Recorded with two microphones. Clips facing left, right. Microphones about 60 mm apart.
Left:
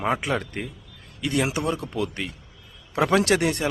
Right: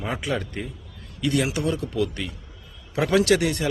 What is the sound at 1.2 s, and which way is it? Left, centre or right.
A man's voice, centre.